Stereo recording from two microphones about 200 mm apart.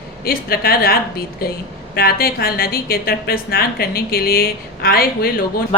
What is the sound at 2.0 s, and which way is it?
A woman's voice, 50° left (ahead or behind).